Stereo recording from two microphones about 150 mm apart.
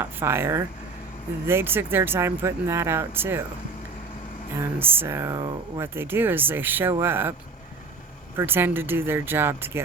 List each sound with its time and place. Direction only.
0.0 s speech: 15° right (ahead or behind)
4.5 s speech: 15° right (ahead or behind)
8.4 s speech: 15° right (ahead or behind)